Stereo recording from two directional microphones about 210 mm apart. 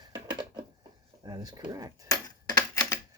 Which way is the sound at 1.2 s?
20° right (ahead or behind).